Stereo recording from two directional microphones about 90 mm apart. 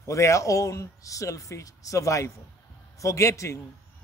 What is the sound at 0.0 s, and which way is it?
A man's voice, 35° left (ahead or behind).